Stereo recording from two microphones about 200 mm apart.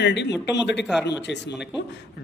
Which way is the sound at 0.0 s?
60° left (ahead or behind).